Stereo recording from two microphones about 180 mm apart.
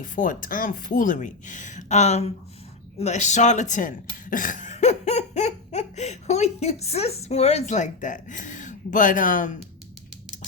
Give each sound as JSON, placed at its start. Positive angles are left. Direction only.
{"t": 0.0, "sound": "speech", "side_deg": 50}